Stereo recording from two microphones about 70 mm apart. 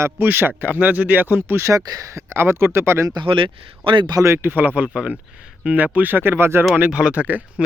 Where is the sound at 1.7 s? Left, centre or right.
Right.